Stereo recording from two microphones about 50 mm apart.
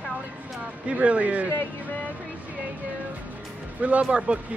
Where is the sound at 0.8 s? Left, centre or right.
Right.